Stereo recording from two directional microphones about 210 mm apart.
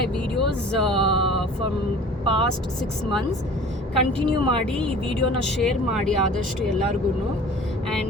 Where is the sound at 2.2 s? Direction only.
25° right (ahead or behind).